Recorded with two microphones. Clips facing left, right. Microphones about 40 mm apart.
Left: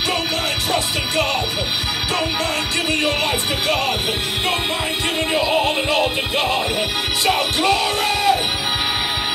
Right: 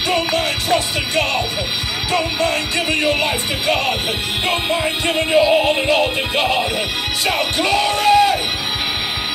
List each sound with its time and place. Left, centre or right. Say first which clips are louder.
0.1 s music: right 3 dB; centre
5.0 s music: right 6 dB; right
7.2 s music: left 1 dB; centre